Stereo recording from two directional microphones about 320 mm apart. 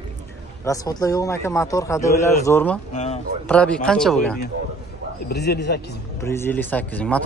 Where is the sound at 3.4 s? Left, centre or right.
Centre.